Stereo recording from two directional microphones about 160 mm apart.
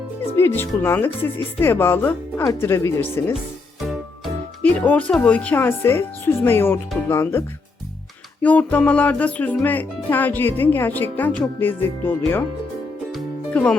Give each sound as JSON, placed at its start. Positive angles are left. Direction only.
{"t": 0.3, "sound": "speech", "side_deg": 15}
{"t": 4.7, "sound": "speech", "side_deg": 10}
{"t": 13.1, "sound": "music", "side_deg": 5}